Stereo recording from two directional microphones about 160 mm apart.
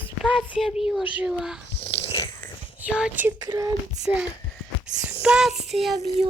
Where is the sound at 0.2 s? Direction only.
Centre (ahead or behind).